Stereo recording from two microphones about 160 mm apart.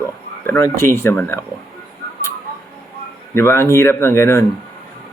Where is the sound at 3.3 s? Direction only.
15° left (ahead or behind).